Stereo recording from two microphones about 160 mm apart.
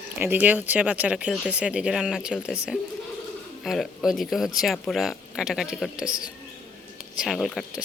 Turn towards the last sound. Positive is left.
turn(degrees=0)  # may be behind; listen again after turning